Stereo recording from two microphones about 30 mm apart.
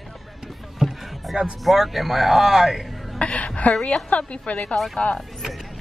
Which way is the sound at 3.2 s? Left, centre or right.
Left.